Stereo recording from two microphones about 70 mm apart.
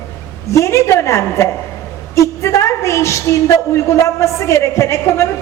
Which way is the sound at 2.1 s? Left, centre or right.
Left.